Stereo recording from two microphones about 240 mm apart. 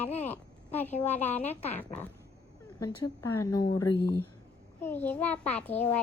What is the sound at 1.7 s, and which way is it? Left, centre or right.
A child's voice, centre.